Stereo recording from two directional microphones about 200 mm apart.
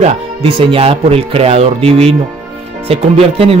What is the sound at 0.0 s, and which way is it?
Speech, 30° right (ahead or behind).